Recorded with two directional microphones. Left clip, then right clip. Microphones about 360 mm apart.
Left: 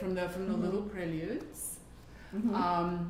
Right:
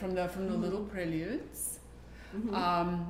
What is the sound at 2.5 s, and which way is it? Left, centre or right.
Speech, centre.